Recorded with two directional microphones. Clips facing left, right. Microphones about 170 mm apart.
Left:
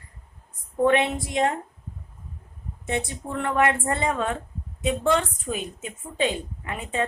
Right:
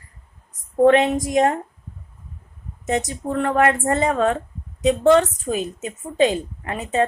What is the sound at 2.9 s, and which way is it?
A woman's voice, 40° right (ahead or behind).